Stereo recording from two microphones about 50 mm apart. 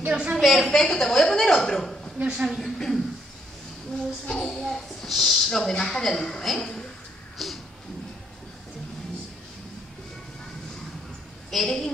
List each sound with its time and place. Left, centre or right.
0.1 s a woman's voice: centre
0.4 s speech: centre
0.7 s a woman's voice: centre
2.2 s a woman's voice: centre
2.5 s speech: centre
4.3 s a woman's voice: centre
7.4 s a sound: centre
11.5 s speech: centre